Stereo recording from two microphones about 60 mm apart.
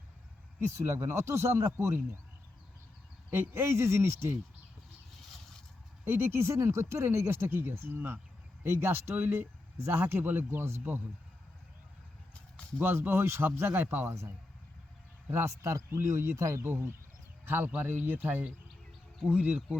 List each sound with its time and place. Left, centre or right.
0.8 s speech: right
3.5 s speech: right
6.1 s speech: right
12.8 s speech: right
15.4 s speech: right
16.6 s speech: right